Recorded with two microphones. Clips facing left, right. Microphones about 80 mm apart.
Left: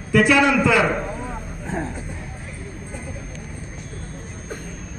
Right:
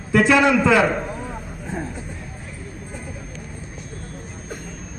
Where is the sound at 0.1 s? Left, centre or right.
Right.